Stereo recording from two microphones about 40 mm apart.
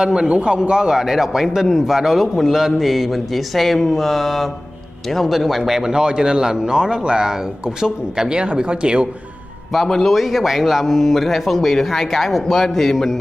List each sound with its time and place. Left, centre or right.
0.0 s a man's voice: centre
9.8 s a man's voice: centre
10.1 s speech: centre